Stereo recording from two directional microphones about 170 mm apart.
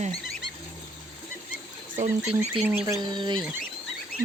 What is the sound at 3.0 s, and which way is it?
Speech, 25° right (ahead or behind).